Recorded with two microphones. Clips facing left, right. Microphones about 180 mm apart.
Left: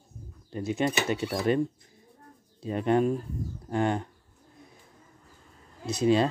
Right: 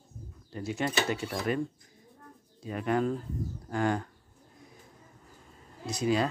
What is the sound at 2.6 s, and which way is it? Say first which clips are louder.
Speech: left 4 dB; 25° left (ahead or behind).